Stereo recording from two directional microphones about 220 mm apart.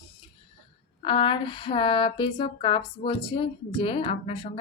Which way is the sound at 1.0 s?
25° left (ahead or behind).